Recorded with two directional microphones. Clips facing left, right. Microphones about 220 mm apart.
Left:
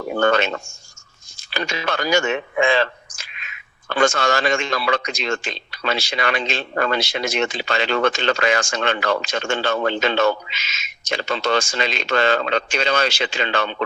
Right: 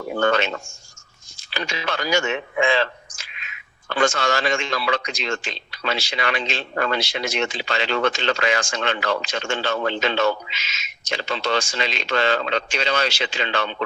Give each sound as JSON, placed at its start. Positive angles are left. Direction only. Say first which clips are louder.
{"t": 0.1, "sound": "speech", "louder": "left 2 dB", "side_deg": 50}